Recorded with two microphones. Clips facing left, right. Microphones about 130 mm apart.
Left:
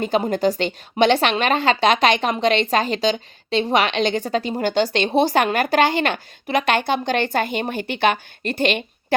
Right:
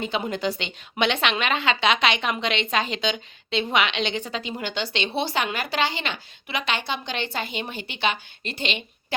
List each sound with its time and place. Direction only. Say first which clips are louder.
0.0 s a woman's voice: left 7 dB; 45° left (ahead or behind)